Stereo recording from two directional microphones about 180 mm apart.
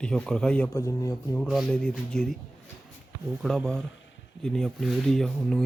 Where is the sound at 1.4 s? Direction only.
5° left (ahead or behind).